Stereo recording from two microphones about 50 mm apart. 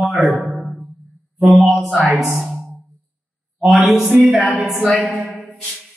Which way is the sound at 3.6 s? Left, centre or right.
Centre.